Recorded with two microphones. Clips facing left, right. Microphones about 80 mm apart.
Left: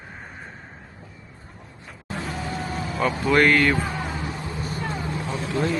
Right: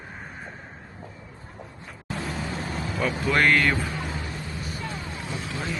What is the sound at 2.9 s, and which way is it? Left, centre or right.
Speech, centre.